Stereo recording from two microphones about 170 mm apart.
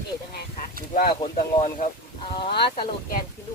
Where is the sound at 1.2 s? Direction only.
45° left (ahead or behind).